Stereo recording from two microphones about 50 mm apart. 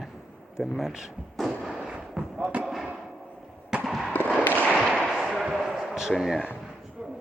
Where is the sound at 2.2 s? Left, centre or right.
Centre.